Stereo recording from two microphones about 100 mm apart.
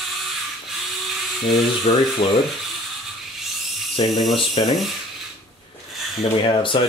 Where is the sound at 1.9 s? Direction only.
90° left.